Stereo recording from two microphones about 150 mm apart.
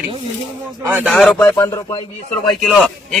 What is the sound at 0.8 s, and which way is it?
Speech, 10° right (ahead or behind).